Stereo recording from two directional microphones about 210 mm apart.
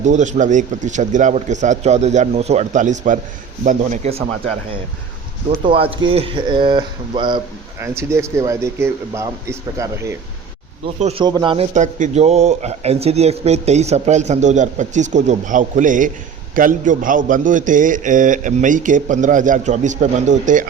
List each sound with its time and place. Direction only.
0.0 s a man's voice: 35° right (ahead or behind)
5.5 s speech: 25° right (ahead or behind)
11.0 s a man's voice: 25° right (ahead or behind)